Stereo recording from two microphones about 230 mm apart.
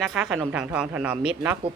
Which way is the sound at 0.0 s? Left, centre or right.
Centre.